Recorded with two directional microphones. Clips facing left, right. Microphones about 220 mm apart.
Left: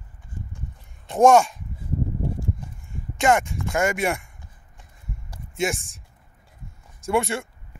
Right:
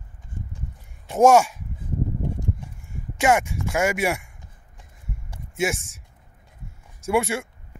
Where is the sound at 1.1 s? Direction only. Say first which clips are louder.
Even; 10° right (ahead or behind).